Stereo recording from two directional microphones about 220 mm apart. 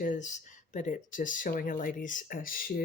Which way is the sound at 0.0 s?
35° left (ahead or behind).